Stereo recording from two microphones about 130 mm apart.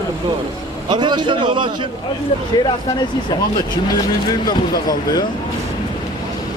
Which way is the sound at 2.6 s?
35° left (ahead or behind).